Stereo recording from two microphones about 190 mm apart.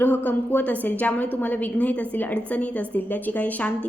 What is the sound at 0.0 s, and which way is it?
A woman's voice, 10° left (ahead or behind).